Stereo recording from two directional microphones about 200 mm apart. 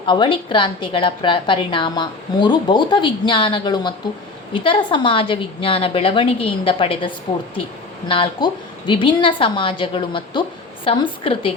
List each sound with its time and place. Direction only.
0.0 s a woman's voice: 25° left (ahead or behind)